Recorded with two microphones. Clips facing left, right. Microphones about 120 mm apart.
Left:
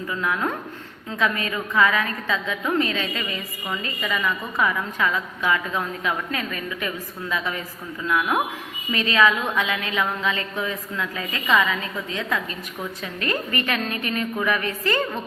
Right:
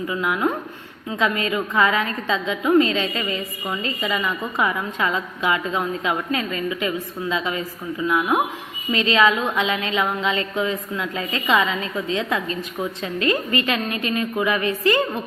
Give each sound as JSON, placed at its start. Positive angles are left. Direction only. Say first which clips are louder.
{"t": 0.1, "sound": "a woman's voice", "louder": "right 2 dB", "side_deg": -15}